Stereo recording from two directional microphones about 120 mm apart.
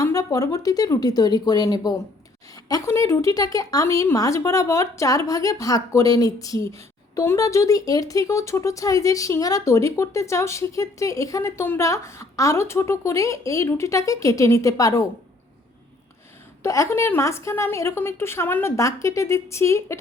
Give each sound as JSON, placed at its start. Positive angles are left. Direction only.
{"t": 0.0, "sound": "speech", "side_deg": 30}
{"t": 16.6, "sound": "speech", "side_deg": 25}